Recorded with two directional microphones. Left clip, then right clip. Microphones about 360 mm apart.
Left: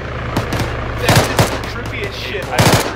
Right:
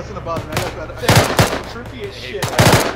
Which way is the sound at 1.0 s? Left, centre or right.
Centre.